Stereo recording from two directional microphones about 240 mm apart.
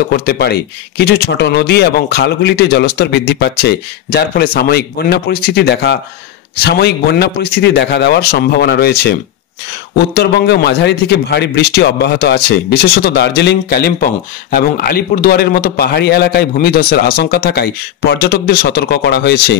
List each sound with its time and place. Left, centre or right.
0.1 s a man's voice: left